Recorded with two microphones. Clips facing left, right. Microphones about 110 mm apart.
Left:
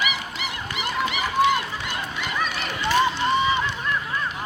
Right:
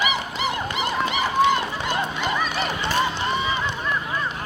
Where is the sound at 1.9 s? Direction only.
30° right (ahead or behind).